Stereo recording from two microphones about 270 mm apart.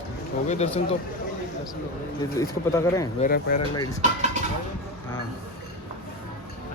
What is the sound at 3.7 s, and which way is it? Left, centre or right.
Speech, centre.